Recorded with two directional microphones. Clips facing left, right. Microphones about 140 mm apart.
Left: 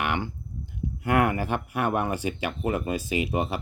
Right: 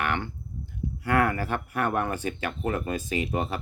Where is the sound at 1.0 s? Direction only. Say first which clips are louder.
Left 1 dB; 20° left (ahead or behind).